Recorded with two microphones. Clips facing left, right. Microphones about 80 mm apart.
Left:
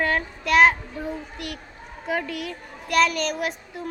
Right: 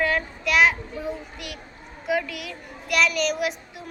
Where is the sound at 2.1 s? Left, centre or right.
Left.